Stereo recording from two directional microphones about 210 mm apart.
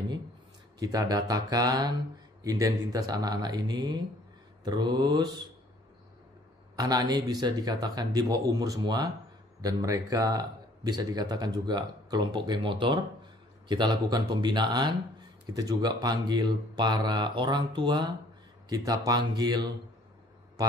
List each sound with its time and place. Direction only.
0.7 s a man's voice: 15° right (ahead or behind)
6.8 s a man's voice: 20° right (ahead or behind)